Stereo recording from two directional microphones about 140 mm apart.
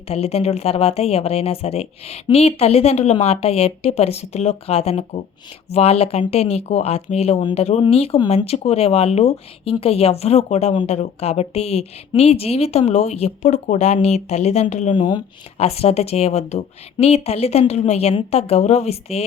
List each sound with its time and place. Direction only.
0.1 s speech: 45° left (ahead or behind)
14.9 s speech: 35° left (ahead or behind)
15.5 s speech: 45° left (ahead or behind)